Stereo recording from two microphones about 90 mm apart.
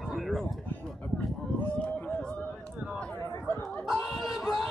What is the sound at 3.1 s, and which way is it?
Chatter, 25° left (ahead or behind).